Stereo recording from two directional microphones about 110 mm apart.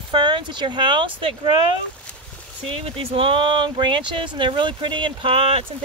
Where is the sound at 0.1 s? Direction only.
45° right (ahead or behind).